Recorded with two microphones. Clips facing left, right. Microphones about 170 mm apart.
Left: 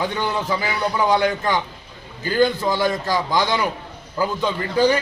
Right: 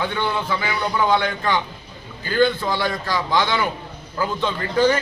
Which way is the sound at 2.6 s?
45° left (ahead or behind).